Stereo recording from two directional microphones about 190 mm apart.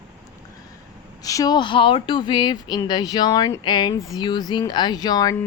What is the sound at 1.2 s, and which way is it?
Speech, 20° left (ahead or behind).